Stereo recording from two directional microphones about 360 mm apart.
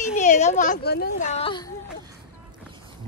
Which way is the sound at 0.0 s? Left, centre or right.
Left.